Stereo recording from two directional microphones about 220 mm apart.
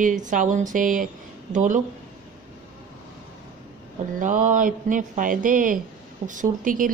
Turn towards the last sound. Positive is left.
turn(degrees=-40)  # may be behind; listen again after turning